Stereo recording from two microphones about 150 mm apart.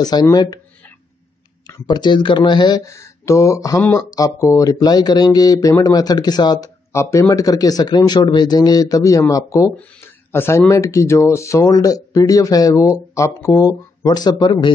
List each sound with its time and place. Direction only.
0.0 s speech: 25° left (ahead or behind)
1.9 s speech: 30° left (ahead or behind)